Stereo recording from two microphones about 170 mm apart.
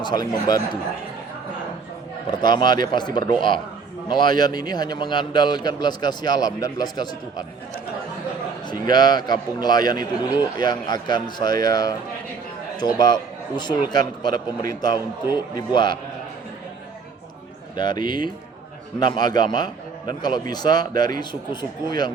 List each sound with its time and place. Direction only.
0.0 s a man's voice: 25° left (ahead or behind)
2.2 s a man's voice: 25° left (ahead or behind)
8.6 s a man's voice: 25° left (ahead or behind)
17.7 s a man's voice: 25° left (ahead or behind)